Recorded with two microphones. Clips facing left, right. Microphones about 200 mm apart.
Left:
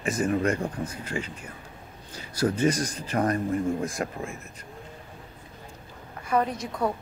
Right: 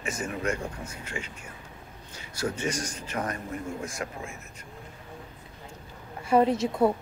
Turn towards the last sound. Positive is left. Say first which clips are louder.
# right 5 dB
turn(degrees=-25)  # may be behind; listen again after turning